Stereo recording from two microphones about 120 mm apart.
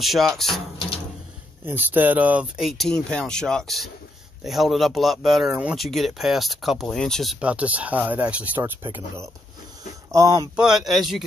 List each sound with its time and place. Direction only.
0.0 s speech: centre (ahead or behind)
1.7 s speech: 15° right (ahead or behind); by 5.5 s centre (ahead or behind)
5.5 s speech: 10° right (ahead or behind)
5.8 s speech: centre (ahead or behind)
7.3 s speech: 10° right (ahead or behind); by 10.5 s 30° right (ahead or behind)
10.5 s speech: 5° right (ahead or behind)